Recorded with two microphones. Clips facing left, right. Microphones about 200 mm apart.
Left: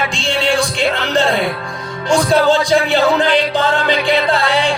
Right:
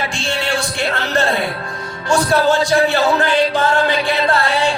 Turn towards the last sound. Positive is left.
turn(degrees=15)  # may be behind; listen again after turning